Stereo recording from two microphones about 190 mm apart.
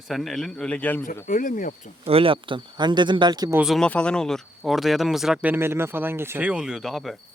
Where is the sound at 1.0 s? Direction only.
45° left (ahead or behind).